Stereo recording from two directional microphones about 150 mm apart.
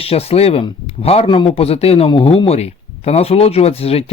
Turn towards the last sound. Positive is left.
turn(degrees=40)  # may be behind; listen again after turning